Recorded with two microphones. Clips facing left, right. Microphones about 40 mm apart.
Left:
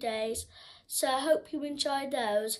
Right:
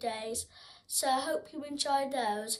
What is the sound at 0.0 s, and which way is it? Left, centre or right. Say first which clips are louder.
A woman's voice: left 4 dB; left.